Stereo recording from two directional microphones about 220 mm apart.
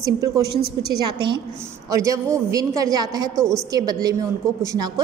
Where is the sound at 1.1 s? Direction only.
20° right (ahead or behind).